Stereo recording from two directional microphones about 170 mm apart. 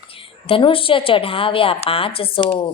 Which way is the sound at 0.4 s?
30° left (ahead or behind).